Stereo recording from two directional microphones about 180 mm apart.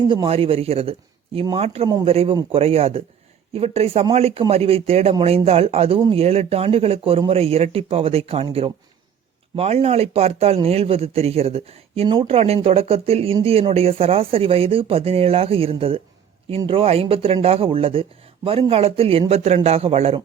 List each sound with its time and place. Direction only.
0.3 s speech: 30° right (ahead or behind)